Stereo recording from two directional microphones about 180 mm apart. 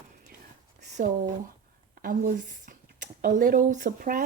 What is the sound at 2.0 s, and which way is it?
A woman's voice, 50° right (ahead or behind).